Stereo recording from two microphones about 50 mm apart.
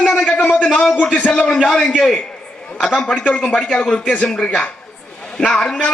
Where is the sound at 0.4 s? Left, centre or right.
Centre.